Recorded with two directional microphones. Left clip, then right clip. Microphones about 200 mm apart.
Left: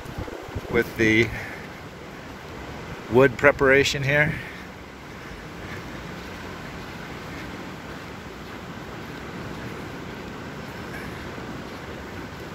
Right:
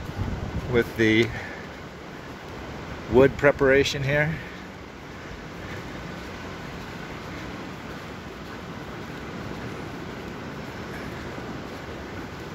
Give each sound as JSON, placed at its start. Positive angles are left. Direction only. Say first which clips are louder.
{"t": 0.7, "sound": "speech", "louder": "left 1 dB", "side_deg": -5}
{"t": 3.2, "sound": "speech", "louder": "left 1 dB", "side_deg": 0}